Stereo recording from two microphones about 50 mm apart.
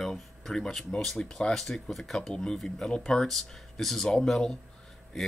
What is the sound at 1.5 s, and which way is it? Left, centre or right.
Speech, centre.